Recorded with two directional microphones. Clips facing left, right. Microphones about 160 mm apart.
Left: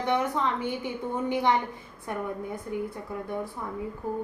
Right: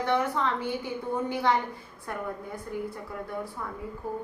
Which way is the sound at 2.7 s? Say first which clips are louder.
Left 2 dB; 20° left (ahead or behind).